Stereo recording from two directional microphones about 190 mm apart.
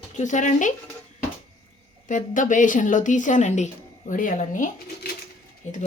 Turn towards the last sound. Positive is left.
turn(degrees=40)  # may be behind; listen again after turning